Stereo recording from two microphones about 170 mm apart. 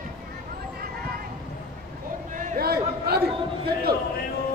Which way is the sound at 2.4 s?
55° right (ahead or behind).